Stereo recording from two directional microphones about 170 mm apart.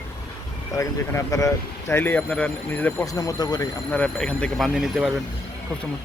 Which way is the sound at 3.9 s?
5° left (ahead or behind).